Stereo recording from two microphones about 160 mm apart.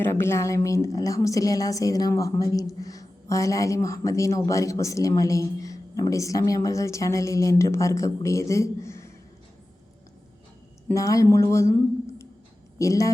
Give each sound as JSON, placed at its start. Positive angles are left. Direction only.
{"t": 0.0, "sound": "a woman's voice", "side_deg": 15}
{"t": 10.9, "sound": "speech", "side_deg": 20}
{"t": 12.8, "sound": "a woman's voice", "side_deg": 20}